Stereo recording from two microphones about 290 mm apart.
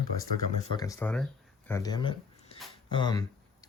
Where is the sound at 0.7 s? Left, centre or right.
Centre.